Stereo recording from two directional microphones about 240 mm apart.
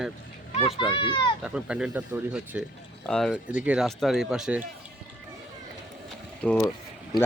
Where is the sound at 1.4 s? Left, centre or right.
Centre.